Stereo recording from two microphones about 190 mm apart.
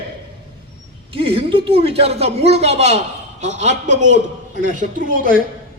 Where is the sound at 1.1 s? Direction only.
30° right (ahead or behind); by 5.3 s 45° right (ahead or behind).